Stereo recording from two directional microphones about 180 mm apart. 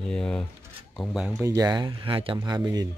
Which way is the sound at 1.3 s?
20° right (ahead or behind).